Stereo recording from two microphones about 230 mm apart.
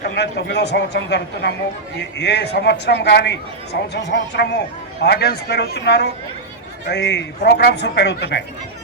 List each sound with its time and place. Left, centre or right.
0.0 s speech: left